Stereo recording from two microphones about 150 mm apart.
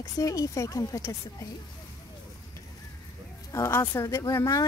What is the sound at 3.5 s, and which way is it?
Speech, 15° left (ahead or behind).